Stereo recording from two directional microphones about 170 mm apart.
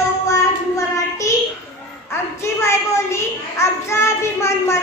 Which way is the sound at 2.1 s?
15° left (ahead or behind).